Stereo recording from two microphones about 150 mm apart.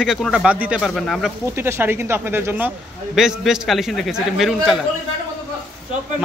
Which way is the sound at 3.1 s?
5° right (ahead or behind).